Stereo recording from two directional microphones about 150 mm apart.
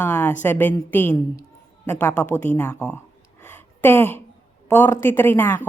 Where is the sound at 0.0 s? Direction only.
10° left (ahead or behind).